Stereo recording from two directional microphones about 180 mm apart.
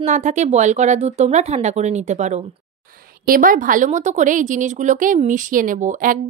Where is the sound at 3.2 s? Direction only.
50° right (ahead or behind).